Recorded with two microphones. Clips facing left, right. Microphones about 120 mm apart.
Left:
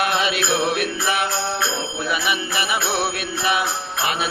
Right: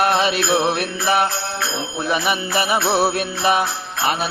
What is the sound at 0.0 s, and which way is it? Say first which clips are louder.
Mantra: right 4 dB; 40° right (ahead or behind).